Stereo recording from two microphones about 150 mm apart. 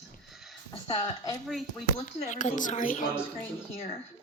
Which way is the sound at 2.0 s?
55° left (ahead or behind).